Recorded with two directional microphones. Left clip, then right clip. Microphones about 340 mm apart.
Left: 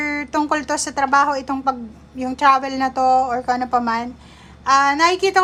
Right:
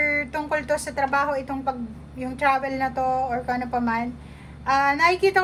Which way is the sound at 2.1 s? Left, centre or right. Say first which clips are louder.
Left 7 dB; centre.